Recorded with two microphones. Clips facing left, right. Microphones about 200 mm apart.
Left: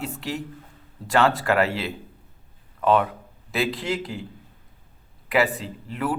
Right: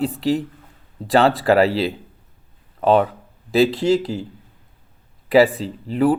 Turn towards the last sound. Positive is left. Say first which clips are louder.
# right 10 dB
turn(degrees=-30)  # may be behind; listen again after turning